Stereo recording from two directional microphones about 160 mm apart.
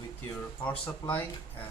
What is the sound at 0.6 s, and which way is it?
Speech, 10° left (ahead or behind).